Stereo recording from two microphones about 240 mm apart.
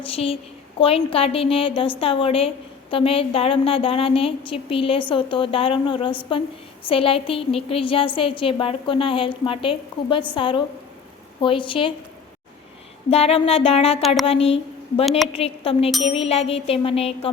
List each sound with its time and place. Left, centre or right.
0.0 s a woman's voice: left
13.1 s a woman's voice: left